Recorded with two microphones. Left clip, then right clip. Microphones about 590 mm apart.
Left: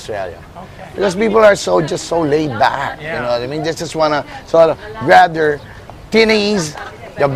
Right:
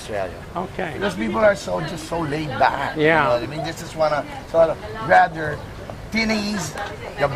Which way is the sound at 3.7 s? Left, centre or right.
Centre.